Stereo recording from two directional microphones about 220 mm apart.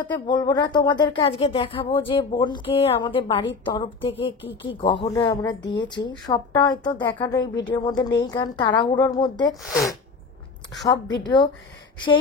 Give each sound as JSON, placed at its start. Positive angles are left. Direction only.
{"t": 0.1, "sound": "speech", "side_deg": 20}
{"t": 9.6, "sound": "speech", "side_deg": 0}
{"t": 11.2, "sound": "speech", "side_deg": 20}